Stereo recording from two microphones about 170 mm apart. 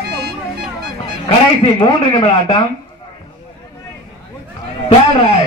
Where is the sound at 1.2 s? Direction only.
35° left (ahead or behind).